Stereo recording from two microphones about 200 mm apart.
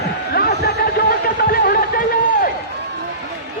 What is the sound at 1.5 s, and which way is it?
Run, 45° left (ahead or behind).